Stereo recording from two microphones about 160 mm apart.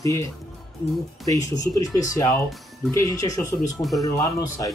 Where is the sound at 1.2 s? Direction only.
20° left (ahead or behind).